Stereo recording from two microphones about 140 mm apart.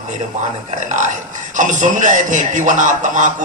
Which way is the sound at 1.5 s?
65° right (ahead or behind).